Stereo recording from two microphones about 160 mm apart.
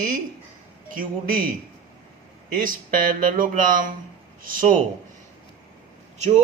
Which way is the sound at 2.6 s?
60° right (ahead or behind).